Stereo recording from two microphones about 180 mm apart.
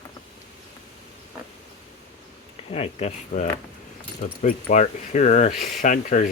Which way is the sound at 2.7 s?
35° left (ahead or behind).